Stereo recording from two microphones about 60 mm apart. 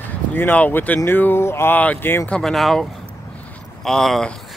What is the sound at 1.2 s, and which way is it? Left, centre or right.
Speech, left.